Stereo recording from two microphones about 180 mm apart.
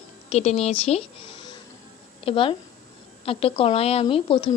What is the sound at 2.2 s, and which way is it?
A woman's voice, 30° left (ahead or behind).